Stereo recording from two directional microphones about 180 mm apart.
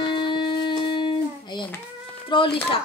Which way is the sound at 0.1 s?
25° left (ahead or behind).